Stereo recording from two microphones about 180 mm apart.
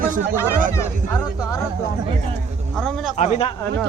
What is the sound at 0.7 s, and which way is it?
Speech, 15° left (ahead or behind).